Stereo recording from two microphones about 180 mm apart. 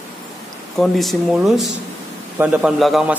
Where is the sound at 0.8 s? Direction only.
Centre (ahead or behind).